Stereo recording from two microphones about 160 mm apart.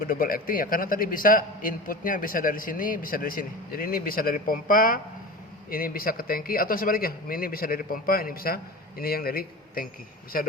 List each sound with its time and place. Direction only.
0.0 s a man's voice: 60° left (ahead or behind)